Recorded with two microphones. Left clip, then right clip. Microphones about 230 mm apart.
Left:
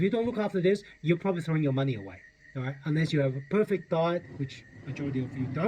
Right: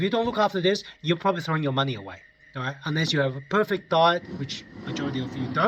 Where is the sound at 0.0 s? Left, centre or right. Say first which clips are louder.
Right 6 dB; right.